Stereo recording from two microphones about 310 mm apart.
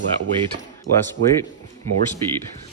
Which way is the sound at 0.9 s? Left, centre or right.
Right.